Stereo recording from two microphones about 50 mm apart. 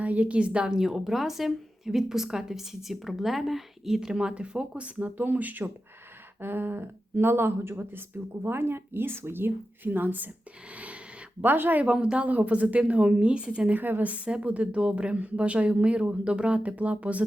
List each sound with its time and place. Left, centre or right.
0.0 s a woman's voice: right
4.9 s speech: right
10.8 s a sound: right
11.4 s speech: right
11.8 s a woman's voice: centre
13.7 s speech: right
14.1 s a woman's voice: right